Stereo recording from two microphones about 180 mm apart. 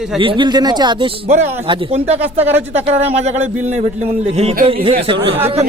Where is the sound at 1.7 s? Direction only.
35° right (ahead or behind).